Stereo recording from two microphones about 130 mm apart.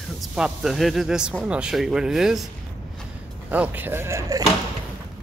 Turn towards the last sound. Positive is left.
turn(degrees=-25)  # may be behind; listen again after turning